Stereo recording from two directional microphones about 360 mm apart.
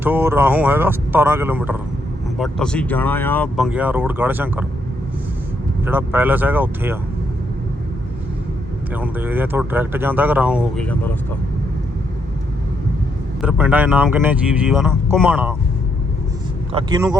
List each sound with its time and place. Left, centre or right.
0.0 s speech: centre
5.8 s speech: centre
8.9 s speech: centre
13.4 s speech: centre
16.7 s speech: centre